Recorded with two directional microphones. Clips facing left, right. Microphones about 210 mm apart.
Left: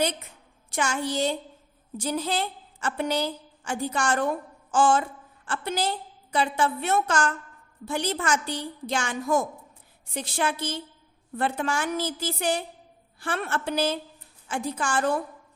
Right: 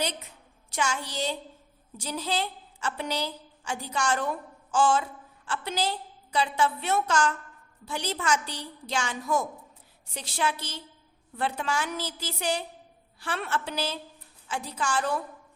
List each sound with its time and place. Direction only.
0.7 s a woman's voice: 50° left (ahead or behind)